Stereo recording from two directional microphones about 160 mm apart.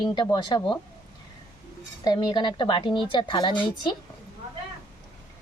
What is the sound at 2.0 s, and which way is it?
Speech, 25° left (ahead or behind).